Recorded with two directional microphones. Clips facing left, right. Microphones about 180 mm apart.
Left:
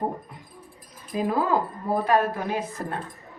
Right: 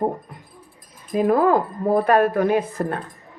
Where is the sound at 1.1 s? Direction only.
55° right (ahead or behind).